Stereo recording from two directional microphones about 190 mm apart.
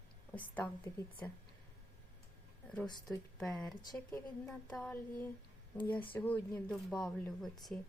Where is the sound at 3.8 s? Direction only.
15° left (ahead or behind).